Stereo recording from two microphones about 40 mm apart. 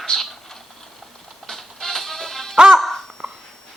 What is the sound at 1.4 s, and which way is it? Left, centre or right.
Music, centre.